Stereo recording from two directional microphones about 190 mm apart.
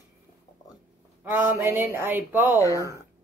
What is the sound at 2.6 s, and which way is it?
Speech, 15° left (ahead or behind).